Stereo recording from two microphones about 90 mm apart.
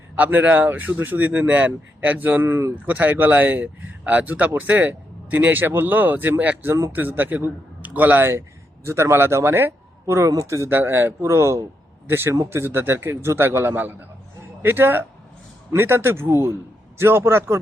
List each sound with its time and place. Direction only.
0.2 s speech: 20° right (ahead or behind)